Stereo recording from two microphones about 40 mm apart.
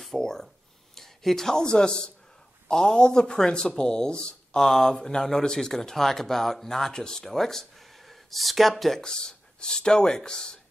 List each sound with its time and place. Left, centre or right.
0.0 s speech: centre
4.6 s speech: centre
7.8 s a sound: centre
9.6 s speech: left